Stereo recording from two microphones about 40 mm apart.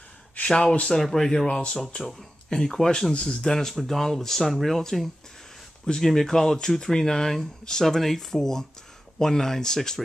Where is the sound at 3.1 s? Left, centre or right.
Left.